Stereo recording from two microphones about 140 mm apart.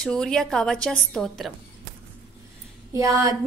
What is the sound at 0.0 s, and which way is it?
A woman's voice, 5° left (ahead or behind).